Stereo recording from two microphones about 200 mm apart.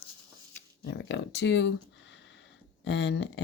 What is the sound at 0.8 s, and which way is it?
Speech, 65° left (ahead or behind).